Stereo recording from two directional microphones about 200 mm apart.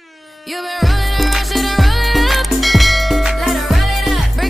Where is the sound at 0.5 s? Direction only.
Centre (ahead or behind).